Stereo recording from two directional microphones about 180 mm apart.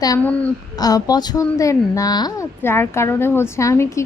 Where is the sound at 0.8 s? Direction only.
20° left (ahead or behind).